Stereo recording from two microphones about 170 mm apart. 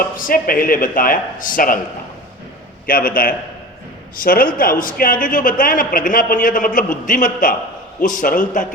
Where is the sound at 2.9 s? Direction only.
60° left (ahead or behind).